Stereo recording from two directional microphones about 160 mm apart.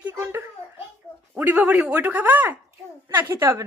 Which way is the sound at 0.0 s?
15° right (ahead or behind).